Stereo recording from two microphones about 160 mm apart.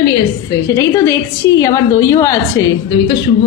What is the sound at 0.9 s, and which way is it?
A woman's voice, 20° left (ahead or behind).